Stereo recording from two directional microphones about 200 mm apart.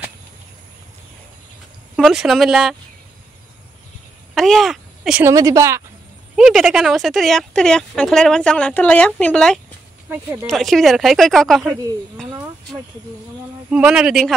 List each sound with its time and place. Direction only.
2.0 s speech: centre (ahead or behind)
4.4 s speech: centre (ahead or behind)
5.2 s speech: 15° right (ahead or behind)
6.3 s speech: centre (ahead or behind)
13.7 s speech: 5° right (ahead or behind)